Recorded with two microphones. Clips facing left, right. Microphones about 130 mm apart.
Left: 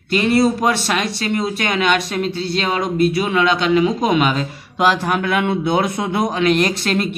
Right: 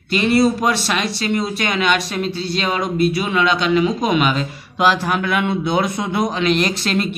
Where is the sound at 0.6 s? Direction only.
45° left (ahead or behind).